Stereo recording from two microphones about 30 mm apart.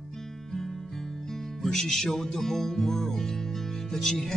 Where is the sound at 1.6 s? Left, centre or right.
Centre.